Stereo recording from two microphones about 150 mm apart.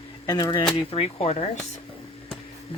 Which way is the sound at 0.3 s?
25° left (ahead or behind).